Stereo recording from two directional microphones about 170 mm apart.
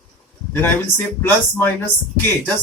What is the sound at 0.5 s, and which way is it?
Speech, 10° left (ahead or behind).